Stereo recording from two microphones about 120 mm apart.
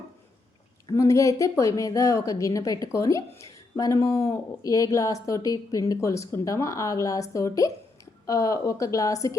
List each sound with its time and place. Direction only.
0.9 s a woman's voice: 25° left (ahead or behind)